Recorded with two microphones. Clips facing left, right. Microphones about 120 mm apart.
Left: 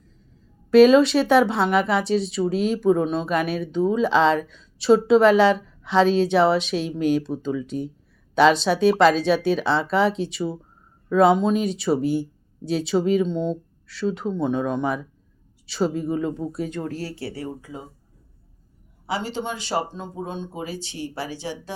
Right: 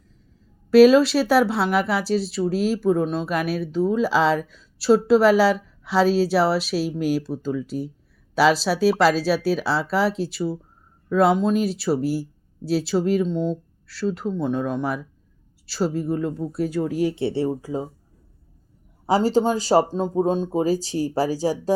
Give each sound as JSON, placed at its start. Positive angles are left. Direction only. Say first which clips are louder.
{"t": 0.7, "sound": "speech", "louder": "even", "side_deg": -5}
{"t": 17.0, "sound": "speech", "louder": "right 9 dB", "side_deg": -20}
{"t": 19.0, "sound": "speech", "louder": "right 9 dB", "side_deg": -40}